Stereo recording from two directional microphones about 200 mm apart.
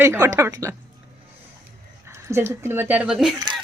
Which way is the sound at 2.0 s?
10° right (ahead or behind).